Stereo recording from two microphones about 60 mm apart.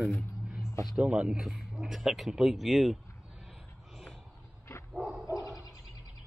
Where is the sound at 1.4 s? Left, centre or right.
Centre.